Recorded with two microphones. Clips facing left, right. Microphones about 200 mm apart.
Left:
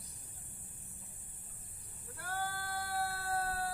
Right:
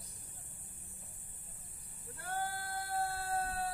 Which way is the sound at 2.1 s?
25° right (ahead or behind).